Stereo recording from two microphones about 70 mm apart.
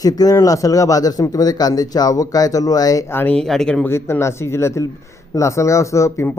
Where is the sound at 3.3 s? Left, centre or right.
Centre.